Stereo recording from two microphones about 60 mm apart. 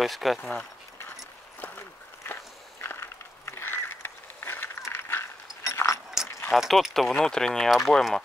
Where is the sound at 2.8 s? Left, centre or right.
Left.